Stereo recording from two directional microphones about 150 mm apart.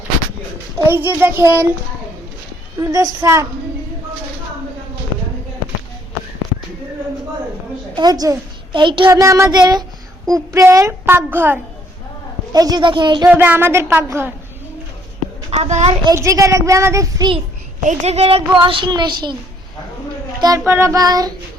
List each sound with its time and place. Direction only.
0.9 s a woman's voice: 15° right (ahead or behind)
2.8 s a child's voice: 25° right (ahead or behind)
7.9 s a child's voice: 25° right (ahead or behind)
12.5 s speech: 25° right (ahead or behind)
13.2 s a woman's voice: 10° right (ahead or behind)
15.4 s a child's voice: 45° right (ahead or behind)
16.0 s a child's voice: 20° right (ahead or behind)
17.8 s speech: 45° right (ahead or behind); by 19.4 s 30° right (ahead or behind)
20.7 s a child's voice: 15° right (ahead or behind)